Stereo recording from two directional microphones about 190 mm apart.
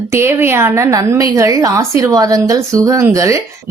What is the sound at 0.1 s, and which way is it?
A woman's voice, 15° right (ahead or behind).